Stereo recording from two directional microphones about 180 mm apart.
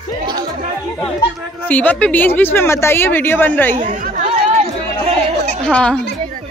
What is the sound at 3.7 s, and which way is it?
Chatter, 45° right (ahead or behind).